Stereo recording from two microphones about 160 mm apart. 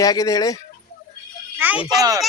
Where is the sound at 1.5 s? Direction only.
10° right (ahead or behind).